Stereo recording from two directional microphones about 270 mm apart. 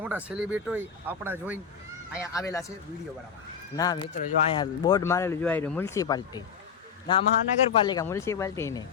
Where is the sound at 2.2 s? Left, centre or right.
Centre.